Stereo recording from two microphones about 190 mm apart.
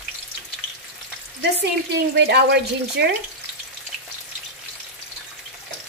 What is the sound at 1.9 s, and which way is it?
A woman's voice, 60° right (ahead or behind).